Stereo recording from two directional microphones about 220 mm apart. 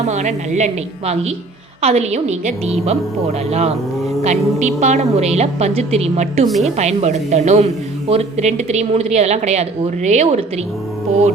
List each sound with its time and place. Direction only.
0.0 s a woman's voice: 30° right (ahead or behind)
4.2 s a woman's voice: 30° right (ahead or behind)
6.5 s a woman's voice: centre (ahead or behind)
6.7 s speech: 30° right (ahead or behind)